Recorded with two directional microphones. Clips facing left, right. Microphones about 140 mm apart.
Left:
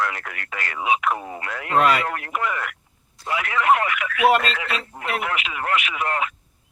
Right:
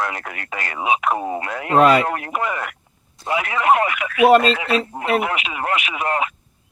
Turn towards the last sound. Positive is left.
turn(degrees=-20)  # may be behind; listen again after turning